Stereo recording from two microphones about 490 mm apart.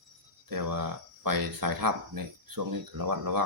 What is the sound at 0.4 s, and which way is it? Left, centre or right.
Speech, right.